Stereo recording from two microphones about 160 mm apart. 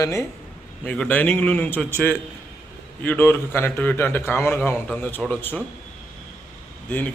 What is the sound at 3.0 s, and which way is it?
A man's voice, 10° left (ahead or behind).